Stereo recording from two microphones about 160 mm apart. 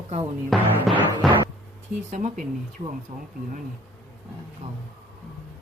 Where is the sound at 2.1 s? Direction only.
50° right (ahead or behind).